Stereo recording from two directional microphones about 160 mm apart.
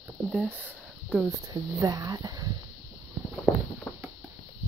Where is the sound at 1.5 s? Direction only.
20° right (ahead or behind).